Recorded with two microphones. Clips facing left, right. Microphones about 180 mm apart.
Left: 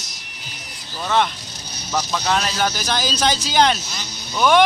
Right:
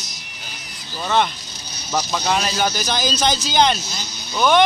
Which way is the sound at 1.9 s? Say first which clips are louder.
Even; 10° right (ahead or behind).